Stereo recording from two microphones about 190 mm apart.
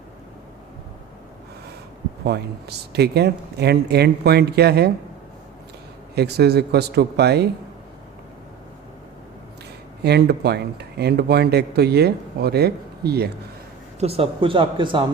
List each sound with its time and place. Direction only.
2.2 s speech: 60° right (ahead or behind)
6.1 s speech: 60° right (ahead or behind)
10.0 s speech: 60° right (ahead or behind)
14.0 s speech: 30° right (ahead or behind)